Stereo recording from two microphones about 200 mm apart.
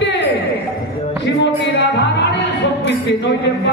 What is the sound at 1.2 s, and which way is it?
Music, 60° left (ahead or behind).